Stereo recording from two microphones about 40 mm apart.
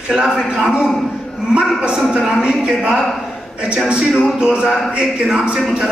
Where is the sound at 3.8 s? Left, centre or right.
Right.